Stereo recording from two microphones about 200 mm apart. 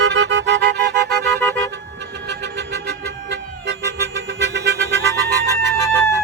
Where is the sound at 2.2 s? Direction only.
60° right (ahead or behind).